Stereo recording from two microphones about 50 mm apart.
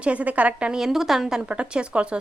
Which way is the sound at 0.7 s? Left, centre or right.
Centre.